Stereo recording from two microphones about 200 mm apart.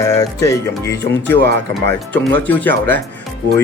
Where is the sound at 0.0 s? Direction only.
15° left (ahead or behind).